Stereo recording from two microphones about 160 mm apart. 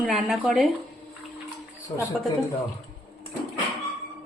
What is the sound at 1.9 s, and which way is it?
Speech, 30° left (ahead or behind).